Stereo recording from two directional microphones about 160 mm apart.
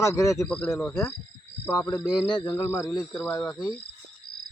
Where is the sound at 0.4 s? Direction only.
5° left (ahead or behind).